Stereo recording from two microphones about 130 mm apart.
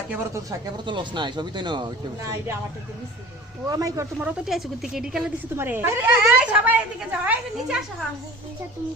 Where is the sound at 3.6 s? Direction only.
25° right (ahead or behind).